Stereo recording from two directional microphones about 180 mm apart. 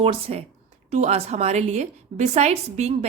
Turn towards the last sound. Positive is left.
turn(degrees=-40)  # may be behind; listen again after turning